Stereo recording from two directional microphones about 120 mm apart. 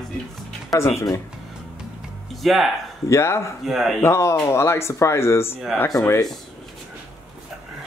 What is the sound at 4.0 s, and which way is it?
Speech, 25° left (ahead or behind).